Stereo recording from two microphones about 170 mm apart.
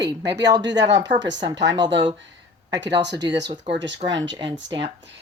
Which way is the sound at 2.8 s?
90° right.